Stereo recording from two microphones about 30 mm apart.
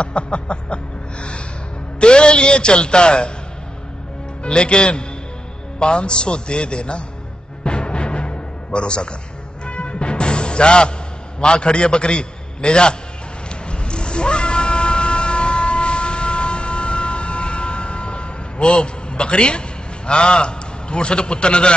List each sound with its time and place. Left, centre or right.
0.0 s a man's voice: left
2.0 s a man's voice: left
4.4 s a man's voice: left
7.6 s music: left
11.3 s a man's voice: left
13.7 s cat: left
20.1 s a man's voice: left